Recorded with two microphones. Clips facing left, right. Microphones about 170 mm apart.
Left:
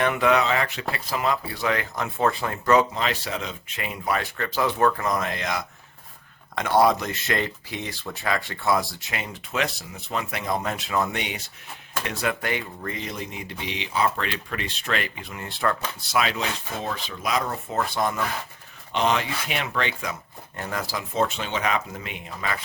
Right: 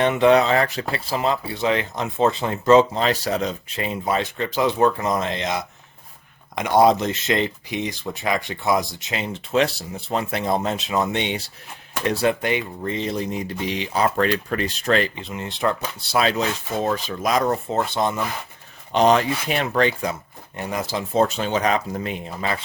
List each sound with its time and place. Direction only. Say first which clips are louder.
0.0 s speech: right 5 dB; 25° right (ahead or behind)
3.8 s speech: right 4 dB; 25° right (ahead or behind)
16.0 s speech: right 4 dB; 30° right (ahead or behind)
16.8 s speech: right 8 dB; 45° right (ahead or behind)
17.7 s speech: right 3 dB; 25° right (ahead or behind)
18.9 s speech: right 7 dB; 40° right (ahead or behind)
20.6 s speech: right 4 dB; 20° right (ahead or behind)
21.1 s speech: right 6 dB; 40° right (ahead or behind)